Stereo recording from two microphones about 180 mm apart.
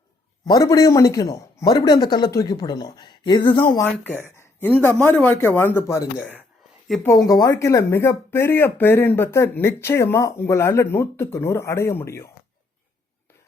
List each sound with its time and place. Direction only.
0.4 s speech: 20° left (ahead or behind)
3.8 s speech: 10° left (ahead or behind)